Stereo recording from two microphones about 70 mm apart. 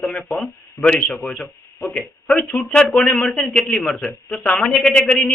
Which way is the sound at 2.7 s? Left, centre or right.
Centre.